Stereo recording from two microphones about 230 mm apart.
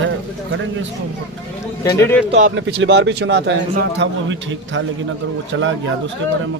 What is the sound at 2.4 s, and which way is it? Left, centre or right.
A man's voice, right.